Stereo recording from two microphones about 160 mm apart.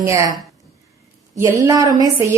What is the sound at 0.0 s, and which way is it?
Speech, 20° right (ahead or behind).